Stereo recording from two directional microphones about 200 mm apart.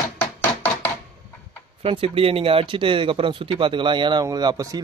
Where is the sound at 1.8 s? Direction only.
30° right (ahead or behind).